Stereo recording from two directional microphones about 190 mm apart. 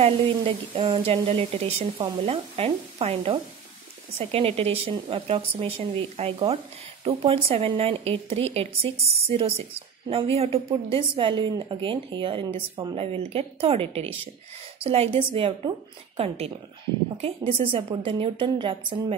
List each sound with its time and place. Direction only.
0.0 s a woman's voice: 30° right (ahead or behind)